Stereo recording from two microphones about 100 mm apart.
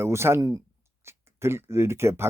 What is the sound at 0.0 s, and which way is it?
Speech, 25° right (ahead or behind).